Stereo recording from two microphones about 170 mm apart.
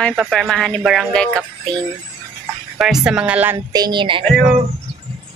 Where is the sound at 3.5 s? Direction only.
25° right (ahead or behind).